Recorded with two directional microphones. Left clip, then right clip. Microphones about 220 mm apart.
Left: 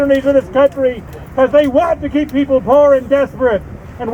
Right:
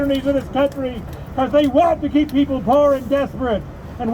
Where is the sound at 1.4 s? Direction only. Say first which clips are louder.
Left 6 dB; 40° left (ahead or behind).